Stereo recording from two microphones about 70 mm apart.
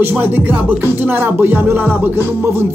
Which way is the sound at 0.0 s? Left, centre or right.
Right.